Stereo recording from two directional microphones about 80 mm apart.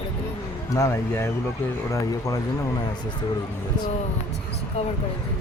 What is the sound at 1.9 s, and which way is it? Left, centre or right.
Speech, left.